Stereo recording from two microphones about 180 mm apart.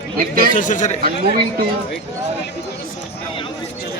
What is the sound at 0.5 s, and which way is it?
Speech, 45° left (ahead or behind).